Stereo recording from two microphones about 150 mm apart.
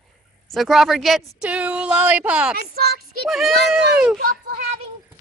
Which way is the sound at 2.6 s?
90° right.